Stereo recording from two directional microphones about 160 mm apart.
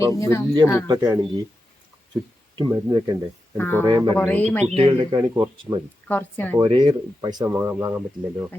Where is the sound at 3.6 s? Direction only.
15° left (ahead or behind).